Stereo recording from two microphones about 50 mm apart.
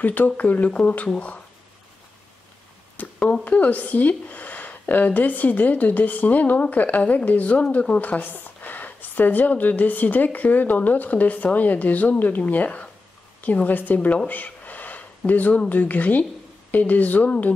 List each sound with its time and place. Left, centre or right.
0.0 s a woman's voice: left
3.0 s a sound: left
3.4 s a woman's voice: left